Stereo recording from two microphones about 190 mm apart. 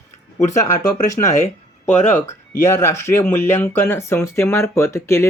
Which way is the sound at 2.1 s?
40° left (ahead or behind).